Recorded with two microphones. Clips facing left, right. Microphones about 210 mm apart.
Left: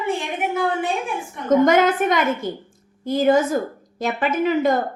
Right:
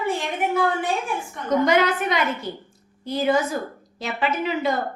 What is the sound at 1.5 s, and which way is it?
A woman's voice, 45° left (ahead or behind).